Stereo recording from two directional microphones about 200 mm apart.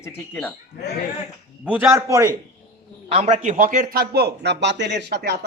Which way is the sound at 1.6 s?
10° right (ahead or behind).